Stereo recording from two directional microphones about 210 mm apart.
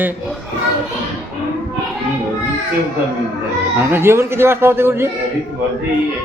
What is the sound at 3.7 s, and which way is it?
A man's voice, 10° right (ahead or behind).